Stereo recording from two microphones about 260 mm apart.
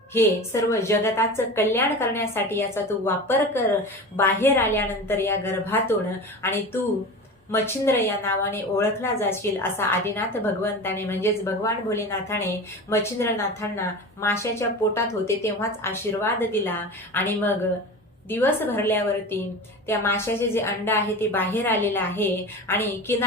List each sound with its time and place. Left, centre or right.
0.1 s a woman's voice: centre
7.5 s a woman's voice: centre